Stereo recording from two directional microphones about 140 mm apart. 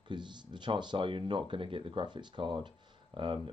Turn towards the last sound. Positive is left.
turn(degrees=-35)  # may be behind; listen again after turning